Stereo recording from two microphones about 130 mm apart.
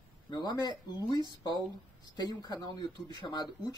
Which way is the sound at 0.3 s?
30° left (ahead or behind).